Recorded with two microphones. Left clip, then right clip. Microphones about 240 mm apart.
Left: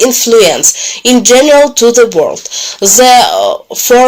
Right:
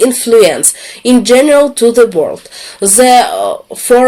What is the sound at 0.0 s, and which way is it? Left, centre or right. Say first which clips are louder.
Speech: left 1 dB; centre.